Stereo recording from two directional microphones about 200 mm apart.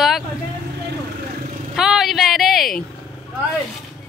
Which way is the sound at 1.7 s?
Centre (ahead or behind).